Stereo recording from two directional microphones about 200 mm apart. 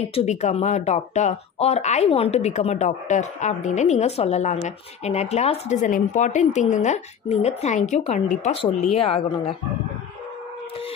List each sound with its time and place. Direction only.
0.0 s speech: 30° left (ahead or behind)